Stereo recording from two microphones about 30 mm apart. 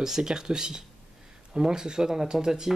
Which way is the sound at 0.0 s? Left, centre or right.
Centre.